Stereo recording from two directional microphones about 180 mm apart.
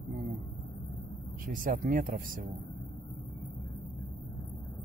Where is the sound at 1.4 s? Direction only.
50° right (ahead or behind).